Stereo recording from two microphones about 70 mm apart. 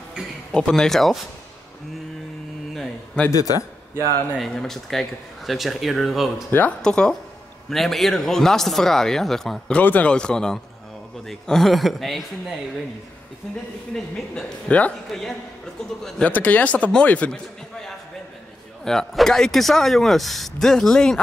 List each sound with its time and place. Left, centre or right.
0.5 s a woman's voice: centre
3.3 s a man's voice: left
4.4 s speech: centre
6.8 s a woman's voice: centre
9.8 s speech: left
10.1 s a woman's voice: centre
13.9 s a woman's voice: centre
16.0 s a woman's voice: centre
16.3 s speech: left
17.3 s a man's voice: centre